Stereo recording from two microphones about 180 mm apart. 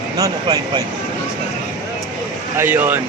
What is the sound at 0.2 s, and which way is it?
Speech, 25° right (ahead or behind).